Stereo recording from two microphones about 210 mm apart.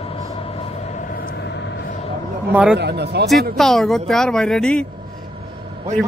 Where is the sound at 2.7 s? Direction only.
50° right (ahead or behind).